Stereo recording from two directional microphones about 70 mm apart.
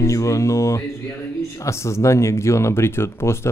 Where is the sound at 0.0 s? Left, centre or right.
Left.